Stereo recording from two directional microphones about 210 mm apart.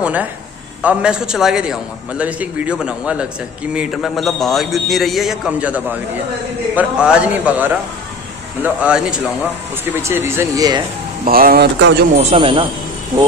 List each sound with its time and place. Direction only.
0.0 s a man's voice: 5° right (ahead or behind)
11.2 s speech: 45° right (ahead or behind)
12.2 s speech: 30° right (ahead or behind)